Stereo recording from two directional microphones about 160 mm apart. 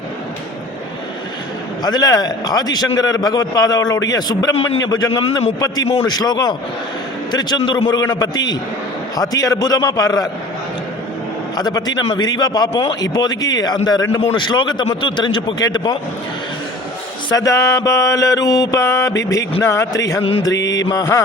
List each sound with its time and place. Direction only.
1.8 s a man's voice: 25° left (ahead or behind)
11.5 s a man's voice: 25° left (ahead or behind)
17.2 s a man's voice: 20° left (ahead or behind)
20.5 s mantra: 90° left
20.9 s a man's voice: 20° left (ahead or behind)